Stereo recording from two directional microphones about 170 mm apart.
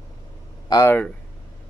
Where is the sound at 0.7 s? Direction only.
15° left (ahead or behind).